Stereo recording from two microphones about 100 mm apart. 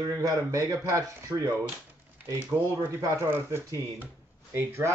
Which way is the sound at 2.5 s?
25° right (ahead or behind).